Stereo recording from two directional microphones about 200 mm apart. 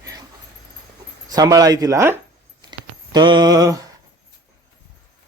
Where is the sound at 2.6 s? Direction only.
20° right (ahead or behind).